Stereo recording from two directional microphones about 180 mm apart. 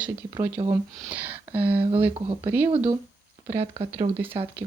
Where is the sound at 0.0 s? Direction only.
10° right (ahead or behind).